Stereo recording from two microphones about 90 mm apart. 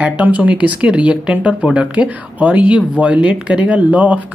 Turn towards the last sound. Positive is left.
turn(degrees=-15)  # may be behind; listen again after turning